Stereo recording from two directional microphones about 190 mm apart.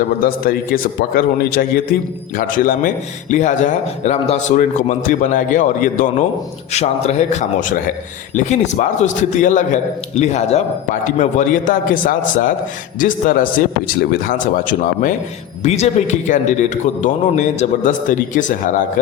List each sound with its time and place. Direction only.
0.2 s a man's voice: 50° left (ahead or behind)